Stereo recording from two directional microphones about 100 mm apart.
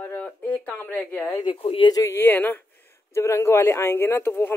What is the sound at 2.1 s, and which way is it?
Speech, 20° left (ahead or behind).